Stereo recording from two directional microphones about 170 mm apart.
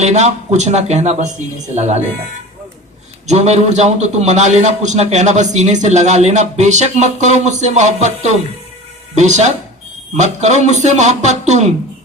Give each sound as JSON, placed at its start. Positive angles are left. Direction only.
{"t": 0.0, "sound": "speech", "side_deg": -40}
{"t": 3.2, "sound": "a man's voice", "side_deg": -40}